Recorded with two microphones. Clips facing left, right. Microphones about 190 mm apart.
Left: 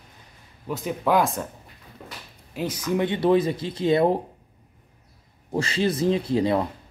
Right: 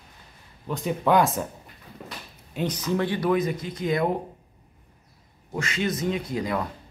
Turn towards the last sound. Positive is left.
turn(degrees=30)  # may be behind; listen again after turning